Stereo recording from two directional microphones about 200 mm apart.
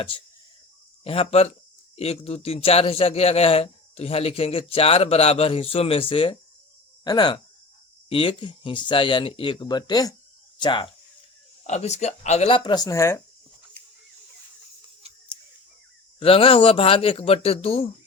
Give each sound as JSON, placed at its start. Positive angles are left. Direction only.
{"t": 1.0, "sound": "a man's voice", "side_deg": 30}
{"t": 11.6, "sound": "a man's voice", "side_deg": 35}
{"t": 16.2, "sound": "a man's voice", "side_deg": 25}